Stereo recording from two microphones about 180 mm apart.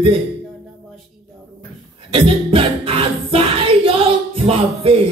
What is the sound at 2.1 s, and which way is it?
Music, 30° right (ahead or behind).